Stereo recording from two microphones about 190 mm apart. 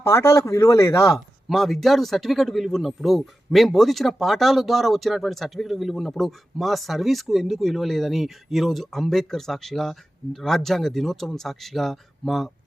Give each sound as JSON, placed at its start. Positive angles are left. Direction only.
{"t": 0.0, "sound": "speech", "side_deg": 15}
{"t": 1.1, "sound": "speech", "side_deg": 0}